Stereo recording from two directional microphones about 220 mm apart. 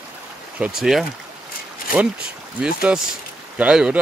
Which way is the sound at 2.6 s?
5° right (ahead or behind).